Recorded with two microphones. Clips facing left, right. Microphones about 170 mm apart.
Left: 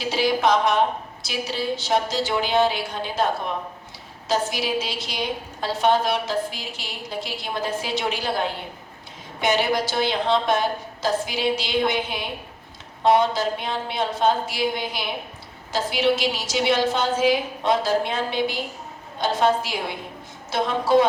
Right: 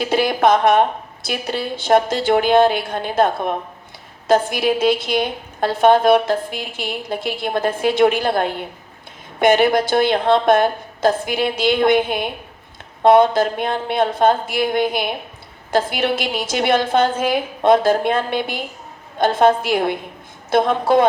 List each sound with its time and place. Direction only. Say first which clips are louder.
0.0 s a woman's voice: right 5 dB; 55° right (ahead or behind)